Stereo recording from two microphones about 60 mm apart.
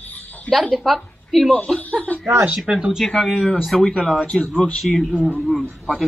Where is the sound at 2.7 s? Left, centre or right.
Centre.